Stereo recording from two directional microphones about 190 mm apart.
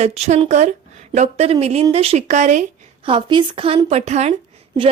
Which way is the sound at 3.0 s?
25° right (ahead or behind).